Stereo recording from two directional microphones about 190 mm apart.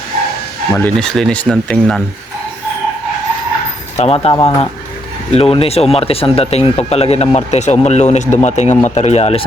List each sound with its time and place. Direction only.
0.7 s speech: 5° left (ahead or behind)
3.9 s speech: 35° left (ahead or behind)